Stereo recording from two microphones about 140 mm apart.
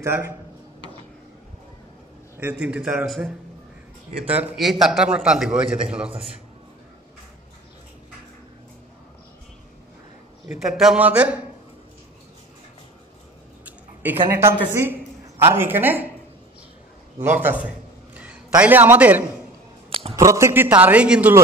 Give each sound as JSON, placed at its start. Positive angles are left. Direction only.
{"t": 0.0, "sound": "a man's voice", "side_deg": -15}
{"t": 2.3, "sound": "a man's voice", "side_deg": -10}
{"t": 10.6, "sound": "a man's voice", "side_deg": -5}
{"t": 14.3, "sound": "a man's voice", "side_deg": -20}
{"t": 17.2, "sound": "a sound", "side_deg": -15}
{"t": 18.6, "sound": "a man's voice", "side_deg": -15}
{"t": 19.9, "sound": "a sound", "side_deg": -45}
{"t": 20.2, "sound": "a man's voice", "side_deg": -20}